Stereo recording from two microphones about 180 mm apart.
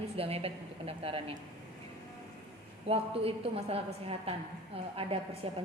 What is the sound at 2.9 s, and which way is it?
A woman's voice, 30° right (ahead or behind).